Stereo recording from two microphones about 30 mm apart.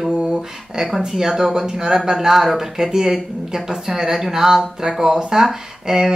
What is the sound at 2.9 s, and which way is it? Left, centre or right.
A woman's voice, centre.